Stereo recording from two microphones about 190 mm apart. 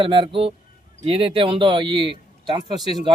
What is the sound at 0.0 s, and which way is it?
Speech, 25° right (ahead or behind).